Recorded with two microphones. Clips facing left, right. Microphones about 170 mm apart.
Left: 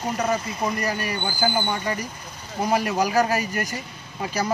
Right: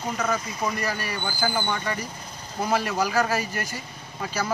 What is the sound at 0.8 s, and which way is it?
A man's voice, 15° left (ahead or behind).